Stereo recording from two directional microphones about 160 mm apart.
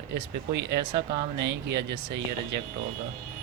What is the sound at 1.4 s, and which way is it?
Speech, 90° right.